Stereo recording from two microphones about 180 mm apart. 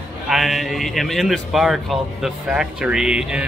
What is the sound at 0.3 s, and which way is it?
A man's voice, centre (ahead or behind).